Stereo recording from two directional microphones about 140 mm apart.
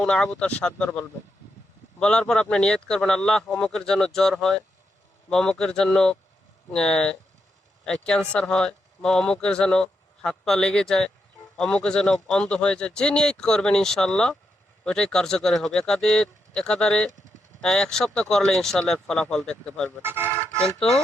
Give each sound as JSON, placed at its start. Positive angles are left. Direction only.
{"t": 0.0, "sound": "speech", "side_deg": 5}
{"t": 20.0, "sound": "speech", "side_deg": -15}
{"t": 20.7, "sound": "speech", "side_deg": 5}